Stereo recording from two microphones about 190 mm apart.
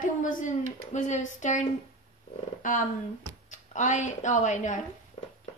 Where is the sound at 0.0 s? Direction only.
45° left (ahead or behind).